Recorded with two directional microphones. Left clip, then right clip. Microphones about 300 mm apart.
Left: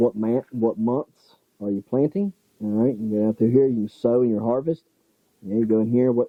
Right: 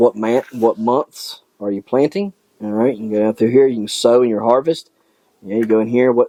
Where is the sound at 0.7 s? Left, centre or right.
Right.